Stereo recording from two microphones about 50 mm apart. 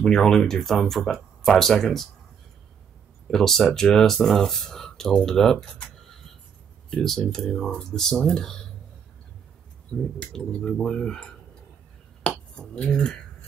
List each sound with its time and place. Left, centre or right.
0.0 s speech: centre
3.3 s speech: centre
6.9 s speech: centre
10.1 s speech: centre
12.3 s finger snapping: left